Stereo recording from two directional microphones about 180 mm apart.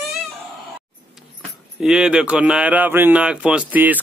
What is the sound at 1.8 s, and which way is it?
Speech, 5° right (ahead or behind).